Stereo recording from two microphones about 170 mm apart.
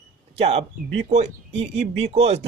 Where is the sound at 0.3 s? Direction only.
35° right (ahead or behind).